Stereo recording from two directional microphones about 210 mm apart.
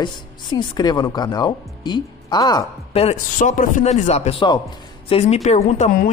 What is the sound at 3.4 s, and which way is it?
A man's voice, 40° left (ahead or behind).